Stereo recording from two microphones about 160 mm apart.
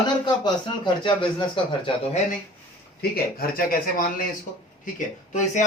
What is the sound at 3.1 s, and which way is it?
Speech, 70° left (ahead or behind).